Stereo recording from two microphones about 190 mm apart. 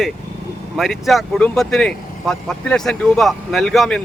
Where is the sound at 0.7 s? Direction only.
Centre (ahead or behind).